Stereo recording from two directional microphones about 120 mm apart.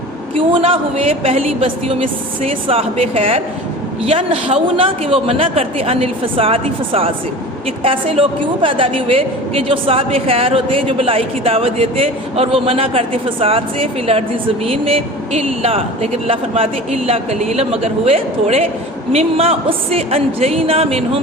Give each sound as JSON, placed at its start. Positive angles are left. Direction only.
{"t": 0.3, "sound": "a woman's voice", "side_deg": -50}